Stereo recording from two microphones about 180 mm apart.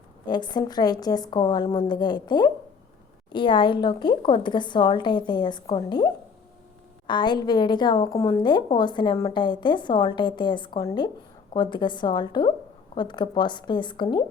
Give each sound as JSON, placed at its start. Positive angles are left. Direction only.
{"t": 0.3, "sound": "a woman's voice", "side_deg": 25}
{"t": 7.1, "sound": "a woman's voice", "side_deg": 25}